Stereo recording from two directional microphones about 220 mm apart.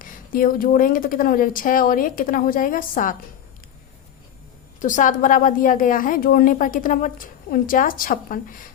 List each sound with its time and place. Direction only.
0.0 s a woman's voice: 40° left (ahead or behind)
4.8 s a woman's voice: 35° left (ahead or behind)